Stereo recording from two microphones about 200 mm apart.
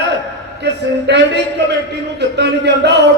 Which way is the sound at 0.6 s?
60° right (ahead or behind).